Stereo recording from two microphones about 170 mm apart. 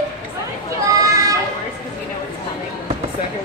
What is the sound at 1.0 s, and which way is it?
Children playing, 20° right (ahead or behind).